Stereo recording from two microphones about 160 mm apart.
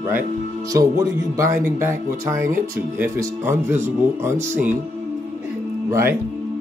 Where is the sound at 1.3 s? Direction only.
20° right (ahead or behind).